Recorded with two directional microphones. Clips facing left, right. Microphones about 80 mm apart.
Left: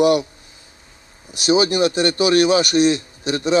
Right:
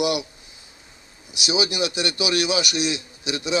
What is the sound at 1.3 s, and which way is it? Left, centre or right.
A man's voice, left.